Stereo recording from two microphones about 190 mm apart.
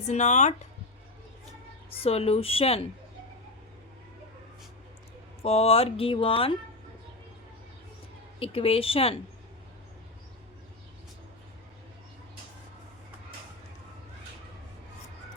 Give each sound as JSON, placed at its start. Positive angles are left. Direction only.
{"t": 0.0, "sound": "speech", "side_deg": 40}
{"t": 1.9, "sound": "speech", "side_deg": 30}
{"t": 5.4, "sound": "speech", "side_deg": 30}
{"t": 8.4, "sound": "speech", "side_deg": 30}